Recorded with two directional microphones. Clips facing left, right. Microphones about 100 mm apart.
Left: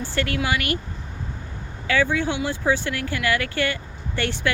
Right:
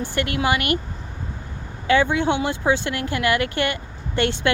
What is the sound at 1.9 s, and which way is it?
Speech, 20° right (ahead or behind).